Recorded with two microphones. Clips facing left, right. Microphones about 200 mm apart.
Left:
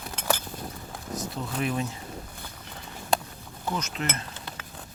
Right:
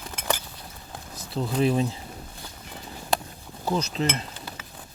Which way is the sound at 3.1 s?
5° right (ahead or behind).